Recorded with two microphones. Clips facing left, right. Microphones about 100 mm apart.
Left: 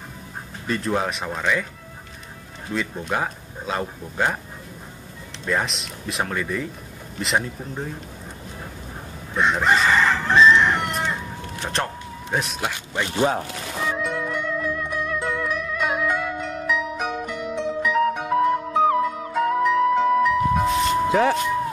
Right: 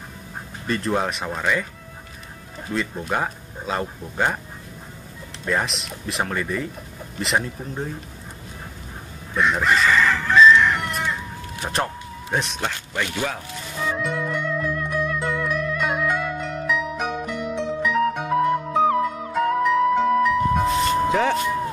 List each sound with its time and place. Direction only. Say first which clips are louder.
0.7 s speech: right 1 dB; centre (ahead or behind)
2.7 s speech: right 1 dB; centre (ahead or behind)
5.4 s speech: even; centre (ahead or behind)
9.3 s speech: even; 20° left (ahead or behind)
9.7 s chicken: left 1 dB; 30° left (ahead or behind)
11.6 s speech: right 2 dB; 5° right (ahead or behind)
12.9 s speech: left 8 dB; 25° left (ahead or behind)
13.8 s music: right 1 dB; centre (ahead or behind)